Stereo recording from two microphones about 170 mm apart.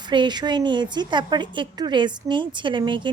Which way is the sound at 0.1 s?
25° right (ahead or behind).